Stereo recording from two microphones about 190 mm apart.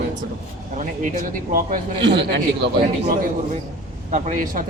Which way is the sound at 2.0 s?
70° right (ahead or behind).